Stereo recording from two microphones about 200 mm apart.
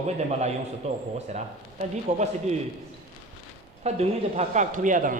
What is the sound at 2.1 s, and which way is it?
Speech, 35° right (ahead or behind).